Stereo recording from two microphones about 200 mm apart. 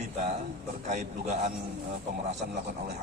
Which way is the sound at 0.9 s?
35° right (ahead or behind).